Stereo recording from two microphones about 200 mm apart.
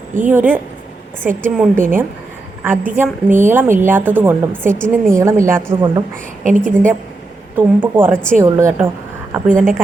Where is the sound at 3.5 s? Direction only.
10° right (ahead or behind).